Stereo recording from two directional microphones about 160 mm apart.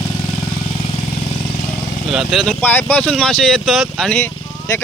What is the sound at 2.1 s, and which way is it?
Speech, centre (ahead or behind).